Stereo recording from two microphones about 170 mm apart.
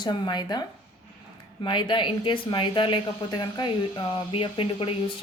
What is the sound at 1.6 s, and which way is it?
Speech, 30° left (ahead or behind).